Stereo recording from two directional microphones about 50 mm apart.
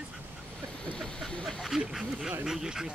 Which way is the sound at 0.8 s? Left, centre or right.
Left.